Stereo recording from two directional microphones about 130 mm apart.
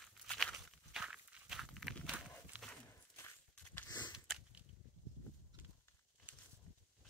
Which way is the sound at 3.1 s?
15° left (ahead or behind).